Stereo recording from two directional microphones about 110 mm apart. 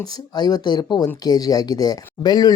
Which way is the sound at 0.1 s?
40° left (ahead or behind).